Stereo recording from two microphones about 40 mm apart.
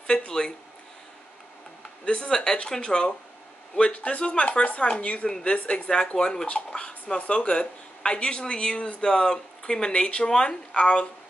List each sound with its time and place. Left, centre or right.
2.0 s speech: left